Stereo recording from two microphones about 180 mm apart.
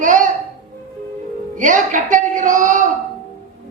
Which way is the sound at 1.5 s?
45° right (ahead or behind).